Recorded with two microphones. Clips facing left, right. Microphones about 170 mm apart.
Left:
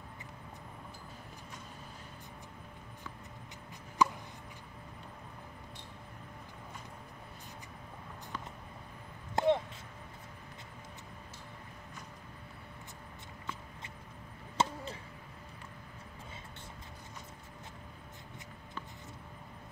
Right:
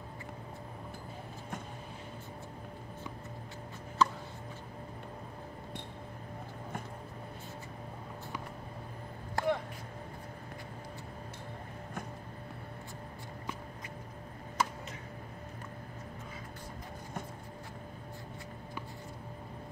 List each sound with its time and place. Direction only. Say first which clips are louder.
4.0 s chopping: even; 15° left (ahead or behind)
9.3 s a sound: left 3 dB; 20° left (ahead or behind)
14.6 s chop: left 2 dB; 25° left (ahead or behind)